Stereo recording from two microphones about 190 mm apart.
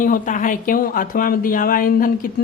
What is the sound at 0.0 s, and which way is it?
Speech, 45° left (ahead or behind).